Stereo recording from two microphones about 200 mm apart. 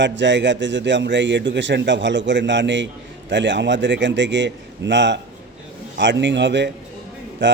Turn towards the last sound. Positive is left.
turn(degrees=-65)  # may be behind; listen again after turning